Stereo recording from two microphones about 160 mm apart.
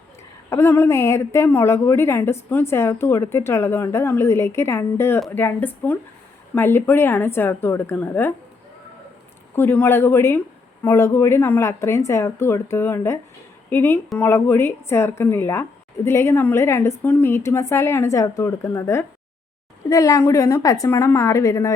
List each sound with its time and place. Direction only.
0.5 s a woman's voice: 15° left (ahead or behind)
9.6 s a woman's voice: 10° left (ahead or behind)